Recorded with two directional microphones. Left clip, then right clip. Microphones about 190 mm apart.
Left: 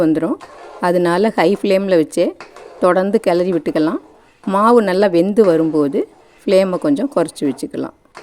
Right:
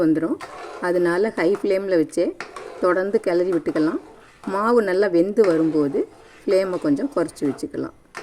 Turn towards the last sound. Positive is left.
turn(degrees=45)  # may be behind; listen again after turning